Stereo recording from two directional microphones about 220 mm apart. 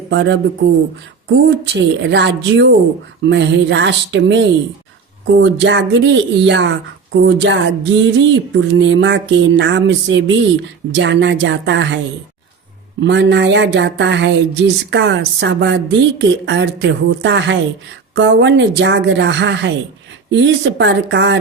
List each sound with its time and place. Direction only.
0.1 s speech: 50° right (ahead or behind)
13.0 s speech: 55° right (ahead or behind)